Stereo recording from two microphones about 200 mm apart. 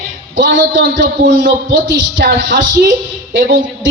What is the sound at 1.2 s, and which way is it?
Speech, 40° right (ahead or behind).